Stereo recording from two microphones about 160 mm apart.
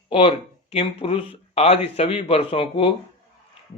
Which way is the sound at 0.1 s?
35° left (ahead or behind).